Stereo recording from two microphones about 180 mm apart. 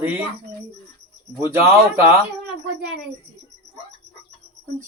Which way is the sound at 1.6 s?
15° right (ahead or behind).